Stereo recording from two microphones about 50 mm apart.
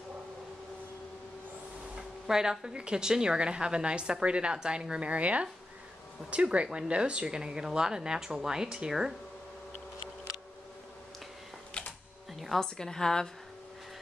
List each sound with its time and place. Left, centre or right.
2.2 s a woman's voice: centre
12.5 s a woman's voice: centre